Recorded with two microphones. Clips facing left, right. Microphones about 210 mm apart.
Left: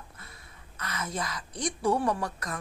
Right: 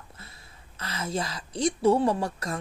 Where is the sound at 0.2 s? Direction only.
25° right (ahead or behind).